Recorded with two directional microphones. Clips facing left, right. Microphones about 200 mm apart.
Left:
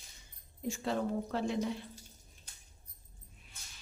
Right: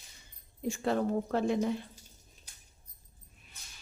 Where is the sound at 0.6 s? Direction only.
55° right (ahead or behind).